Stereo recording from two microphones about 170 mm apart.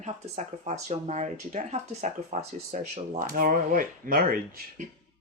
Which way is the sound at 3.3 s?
55° right (ahead or behind).